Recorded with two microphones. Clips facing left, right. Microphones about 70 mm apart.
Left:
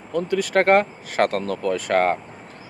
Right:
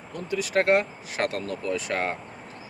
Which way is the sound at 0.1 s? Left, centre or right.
Left.